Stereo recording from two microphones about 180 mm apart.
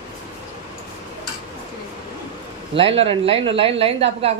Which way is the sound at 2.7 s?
30° right (ahead or behind).